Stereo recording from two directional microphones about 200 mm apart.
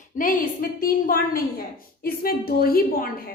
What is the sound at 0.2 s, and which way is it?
A woman's voice, 45° left (ahead or behind).